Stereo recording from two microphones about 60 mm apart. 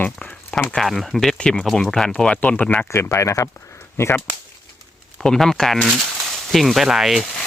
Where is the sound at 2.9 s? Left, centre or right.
Left.